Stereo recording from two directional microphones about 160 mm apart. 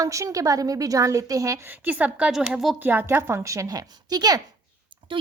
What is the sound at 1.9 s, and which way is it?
A woman's voice, 10° right (ahead or behind).